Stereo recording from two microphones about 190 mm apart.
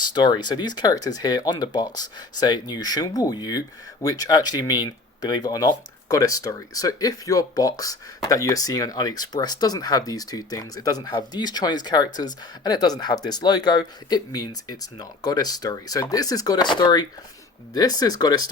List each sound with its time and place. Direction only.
0.0 s speech: 25° left (ahead or behind)